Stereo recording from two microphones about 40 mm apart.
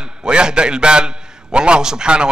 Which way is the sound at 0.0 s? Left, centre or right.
Right.